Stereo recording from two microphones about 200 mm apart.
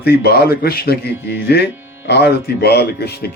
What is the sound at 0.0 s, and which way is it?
A man's voice, 50° left (ahead or behind).